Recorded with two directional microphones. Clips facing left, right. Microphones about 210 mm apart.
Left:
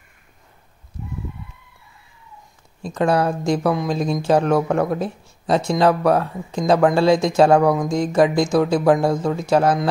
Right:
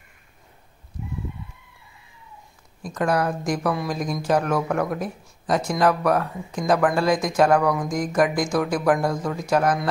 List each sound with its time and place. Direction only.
2.8 s speech: 25° left (ahead or behind)